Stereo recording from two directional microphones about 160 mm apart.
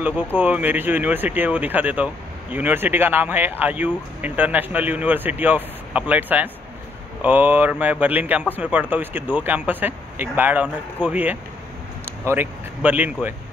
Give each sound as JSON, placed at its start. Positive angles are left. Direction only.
{"t": 0.0, "sound": "speech", "side_deg": -10}